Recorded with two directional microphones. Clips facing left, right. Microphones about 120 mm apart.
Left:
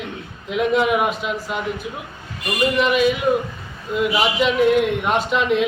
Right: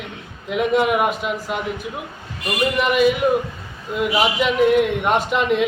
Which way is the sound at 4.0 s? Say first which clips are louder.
Even; centre (ahead or behind).